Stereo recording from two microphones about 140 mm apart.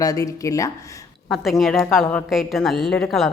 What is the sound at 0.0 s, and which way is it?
Speech, 25° left (ahead or behind).